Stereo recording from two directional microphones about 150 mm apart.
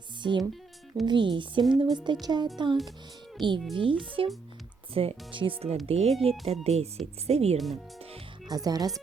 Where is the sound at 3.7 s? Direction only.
35° right (ahead or behind).